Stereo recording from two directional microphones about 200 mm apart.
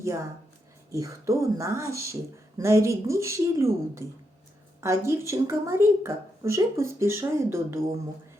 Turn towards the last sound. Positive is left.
turn(degrees=-15)  # may be behind; listen again after turning